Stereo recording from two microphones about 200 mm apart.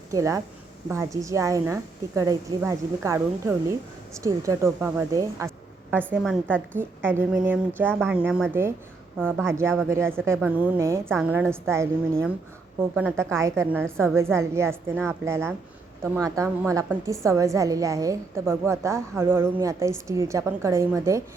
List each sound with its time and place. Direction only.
0.1 s a woman's voice: 15° right (ahead or behind)
6.2 s a woman's voice: centre (ahead or behind)
6.7 s a woman's voice: 10° right (ahead or behind)
13.0 s a woman's voice: 10° right (ahead or behind)